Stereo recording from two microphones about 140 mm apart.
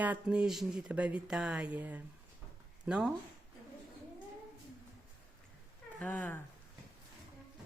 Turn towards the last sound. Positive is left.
turn(degrees=10)  # may be behind; listen again after turning